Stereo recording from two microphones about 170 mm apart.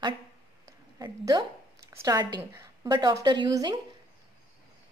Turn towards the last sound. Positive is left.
turn(degrees=-25)  # may be behind; listen again after turning